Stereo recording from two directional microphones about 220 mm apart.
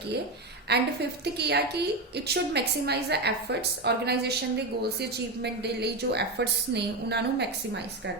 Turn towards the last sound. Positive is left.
turn(degrees=-50)  # may be behind; listen again after turning